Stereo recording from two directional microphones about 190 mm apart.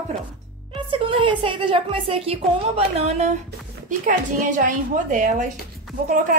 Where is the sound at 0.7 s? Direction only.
25° right (ahead or behind).